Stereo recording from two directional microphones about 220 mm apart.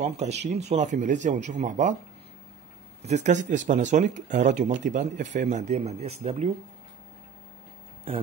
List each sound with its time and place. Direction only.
0.0 s speech: 30° right (ahead or behind)
3.0 s speech: 30° right (ahead or behind)